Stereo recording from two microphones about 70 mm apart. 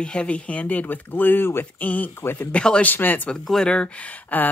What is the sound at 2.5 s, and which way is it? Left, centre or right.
Speech, centre.